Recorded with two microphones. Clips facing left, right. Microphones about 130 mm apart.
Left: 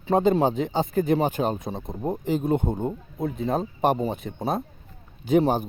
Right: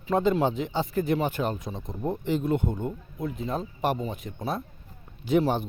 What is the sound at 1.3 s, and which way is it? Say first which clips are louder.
Speech: left 4 dB; 20° left (ahead or behind).